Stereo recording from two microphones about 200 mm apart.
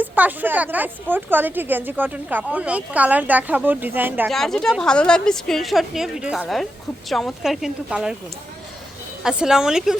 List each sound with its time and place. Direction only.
0.0 s speech: 10° right (ahead or behind)
4.3 s a woman's voice: centre (ahead or behind)
9.2 s a woman's voice: 5° right (ahead or behind)